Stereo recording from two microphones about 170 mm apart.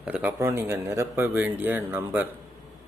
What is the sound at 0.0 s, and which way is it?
Speech, 10° right (ahead or behind).